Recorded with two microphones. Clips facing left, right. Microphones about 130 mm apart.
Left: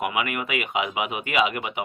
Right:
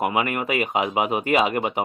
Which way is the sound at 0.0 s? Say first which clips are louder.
Right 4 dB; 35° right (ahead or behind).